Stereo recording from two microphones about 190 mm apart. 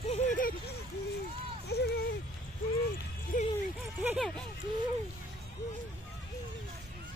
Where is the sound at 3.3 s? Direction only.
45° left (ahead or behind).